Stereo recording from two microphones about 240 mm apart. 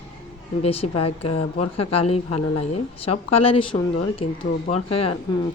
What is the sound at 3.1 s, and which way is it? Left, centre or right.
Speech, left.